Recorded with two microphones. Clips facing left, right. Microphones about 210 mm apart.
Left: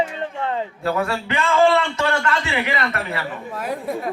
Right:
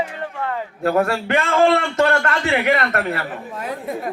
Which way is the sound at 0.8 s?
55° right (ahead or behind).